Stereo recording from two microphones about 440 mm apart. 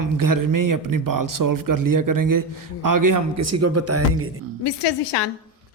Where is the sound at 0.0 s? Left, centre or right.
Right.